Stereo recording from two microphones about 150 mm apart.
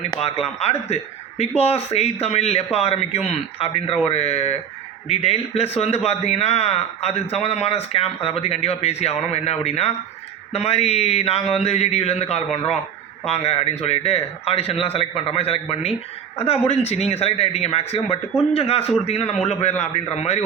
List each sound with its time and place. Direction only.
0.2 s a man's voice: 40° left (ahead or behind)